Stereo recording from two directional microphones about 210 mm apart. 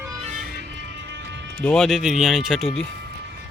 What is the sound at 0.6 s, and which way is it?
Music, 55° right (ahead or behind).